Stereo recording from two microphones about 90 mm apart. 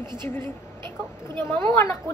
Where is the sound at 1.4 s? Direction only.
30° left (ahead or behind).